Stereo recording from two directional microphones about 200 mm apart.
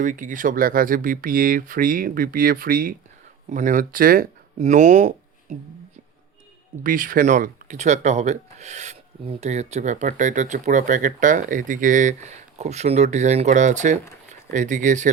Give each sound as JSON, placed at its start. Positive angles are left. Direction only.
{"t": 0.0, "sound": "speech", "side_deg": -40}
{"t": 6.8, "sound": "speech", "side_deg": -40}